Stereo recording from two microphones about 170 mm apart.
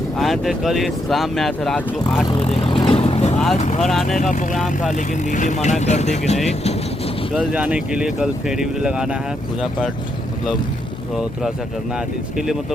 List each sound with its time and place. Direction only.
0.2 s speech: centre (ahead or behind)
2.2 s vehicle: 35° left (ahead or behind)
3.3 s speech: centre (ahead or behind)
4.2 s speech: 45° left (ahead or behind)
4.5 s speech: centre (ahead or behind)
4.9 s speech: 45° left (ahead or behind)
7.3 s speech: 10° right (ahead or behind)